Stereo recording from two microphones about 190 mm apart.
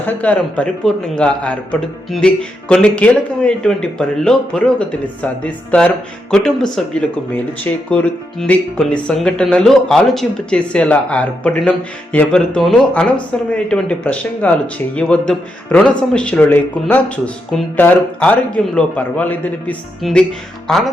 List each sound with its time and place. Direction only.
0.0 s a man's voice: 5° left (ahead or behind)